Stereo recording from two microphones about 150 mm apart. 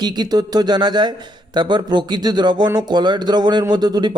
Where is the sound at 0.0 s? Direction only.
30° right (ahead or behind).